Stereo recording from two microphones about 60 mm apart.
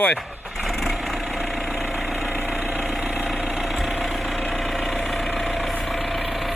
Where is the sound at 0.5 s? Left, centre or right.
Centre.